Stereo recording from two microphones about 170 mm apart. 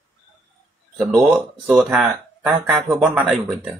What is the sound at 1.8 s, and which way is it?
Speech, 5° right (ahead or behind).